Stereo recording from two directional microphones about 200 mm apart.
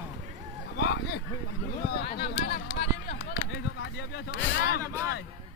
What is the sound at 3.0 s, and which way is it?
Chop, 55° left (ahead or behind).